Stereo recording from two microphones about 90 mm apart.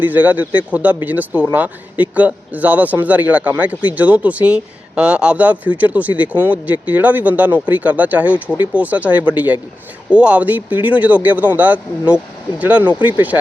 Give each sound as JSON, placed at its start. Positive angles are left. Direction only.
{"t": 0.0, "sound": "speech", "side_deg": -20}